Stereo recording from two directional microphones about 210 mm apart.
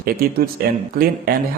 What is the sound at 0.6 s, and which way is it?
Speech, 45° right (ahead or behind).